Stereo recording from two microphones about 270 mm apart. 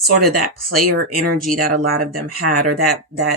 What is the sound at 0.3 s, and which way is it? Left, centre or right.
Speech, right.